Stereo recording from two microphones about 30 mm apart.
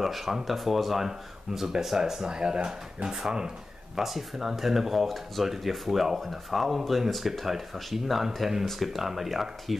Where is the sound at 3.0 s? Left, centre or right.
Centre.